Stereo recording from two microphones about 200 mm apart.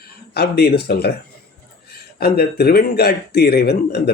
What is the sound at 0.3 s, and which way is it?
Speech, 50° left (ahead or behind).